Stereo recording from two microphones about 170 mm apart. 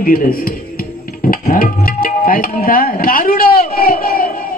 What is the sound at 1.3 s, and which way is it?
Music, 60° left (ahead or behind).